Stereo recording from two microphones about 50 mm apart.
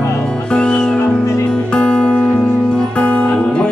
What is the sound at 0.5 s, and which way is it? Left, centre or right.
Music, centre.